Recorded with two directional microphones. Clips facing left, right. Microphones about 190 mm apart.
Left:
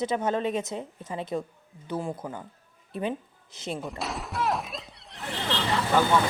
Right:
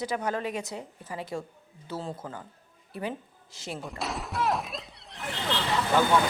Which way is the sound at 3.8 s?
Centre (ahead or behind).